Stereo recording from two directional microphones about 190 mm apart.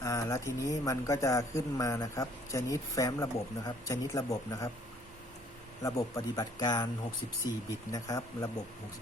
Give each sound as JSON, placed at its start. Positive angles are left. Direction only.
{"t": 0.0, "sound": "a man's voice", "side_deg": 15}
{"t": 5.8, "sound": "a man's voice", "side_deg": 15}
{"t": 7.9, "sound": "a man's voice", "side_deg": 20}